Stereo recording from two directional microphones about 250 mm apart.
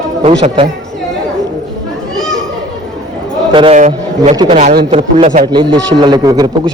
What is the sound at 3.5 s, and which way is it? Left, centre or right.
A man's voice, right.